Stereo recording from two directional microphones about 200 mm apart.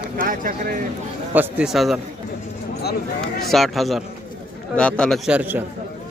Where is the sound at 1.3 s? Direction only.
10° right (ahead or behind).